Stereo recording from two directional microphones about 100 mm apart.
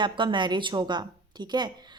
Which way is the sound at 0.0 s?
55° right (ahead or behind).